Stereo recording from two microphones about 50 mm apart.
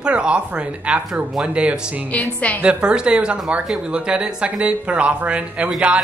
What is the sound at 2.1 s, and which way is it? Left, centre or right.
Speech, left.